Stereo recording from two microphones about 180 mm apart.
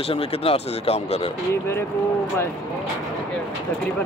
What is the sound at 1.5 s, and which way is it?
Speech, 15° left (ahead or behind).